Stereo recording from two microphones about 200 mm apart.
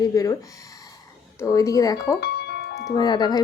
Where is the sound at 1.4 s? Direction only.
15° left (ahead or behind).